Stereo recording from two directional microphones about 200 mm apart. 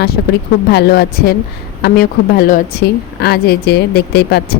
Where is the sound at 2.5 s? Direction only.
50° left (ahead or behind).